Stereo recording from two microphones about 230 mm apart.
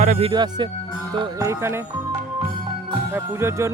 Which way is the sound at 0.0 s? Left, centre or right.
Right.